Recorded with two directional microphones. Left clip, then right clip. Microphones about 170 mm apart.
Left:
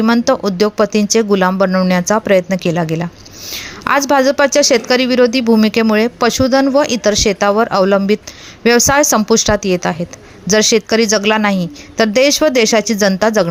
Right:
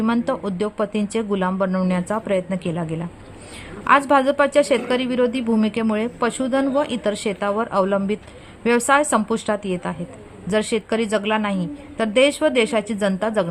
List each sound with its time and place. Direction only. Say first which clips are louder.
0.0 s speech: left 9 dB; 30° left (ahead or behind)
4.1 s speech: left 5 dB; 30° left (ahead or behind)